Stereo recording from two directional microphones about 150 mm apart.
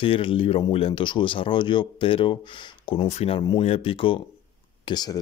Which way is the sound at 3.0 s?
45° left (ahead or behind).